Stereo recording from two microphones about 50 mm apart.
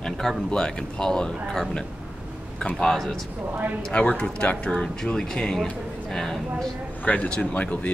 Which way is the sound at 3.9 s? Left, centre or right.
Left.